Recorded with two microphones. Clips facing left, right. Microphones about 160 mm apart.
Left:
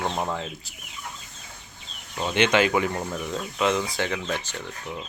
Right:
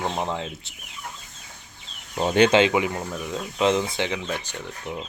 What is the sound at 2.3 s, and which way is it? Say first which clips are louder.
Speech: right 4 dB; 35° right (ahead or behind).